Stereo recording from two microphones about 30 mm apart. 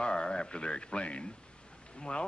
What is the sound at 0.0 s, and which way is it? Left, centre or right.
A man's voice, left.